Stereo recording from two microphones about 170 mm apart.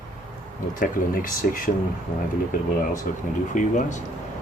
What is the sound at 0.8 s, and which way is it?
Speech, 55° left (ahead or behind).